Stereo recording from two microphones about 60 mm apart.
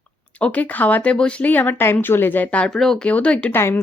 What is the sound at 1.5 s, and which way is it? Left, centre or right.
Speech, left.